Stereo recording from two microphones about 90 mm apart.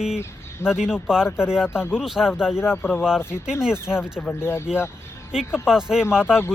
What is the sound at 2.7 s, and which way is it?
Speech, 25° left (ahead or behind).